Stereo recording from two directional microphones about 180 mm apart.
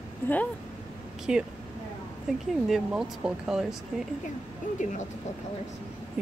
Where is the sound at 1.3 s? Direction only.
5° right (ahead or behind).